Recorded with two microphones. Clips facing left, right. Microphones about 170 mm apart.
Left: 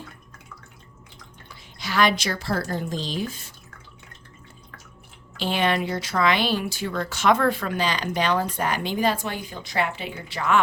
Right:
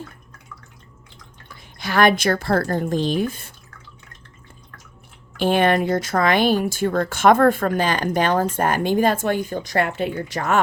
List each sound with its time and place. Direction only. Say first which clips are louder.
1.8 s speech: right 5 dB; 55° right (ahead or behind)
5.4 s speech: right 6 dB; 50° right (ahead or behind)